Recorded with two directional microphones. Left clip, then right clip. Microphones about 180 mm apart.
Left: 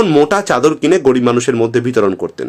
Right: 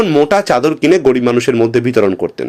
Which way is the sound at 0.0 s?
5° right (ahead or behind).